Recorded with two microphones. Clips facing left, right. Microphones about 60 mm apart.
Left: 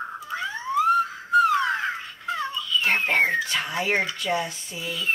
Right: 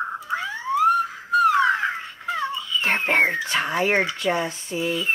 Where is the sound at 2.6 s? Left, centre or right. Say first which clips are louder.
Even; right.